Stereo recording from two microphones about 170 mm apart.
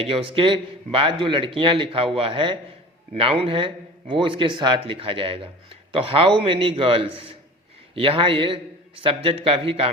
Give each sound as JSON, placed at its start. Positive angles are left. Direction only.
{"t": 0.0, "sound": "a man's voice", "side_deg": -35}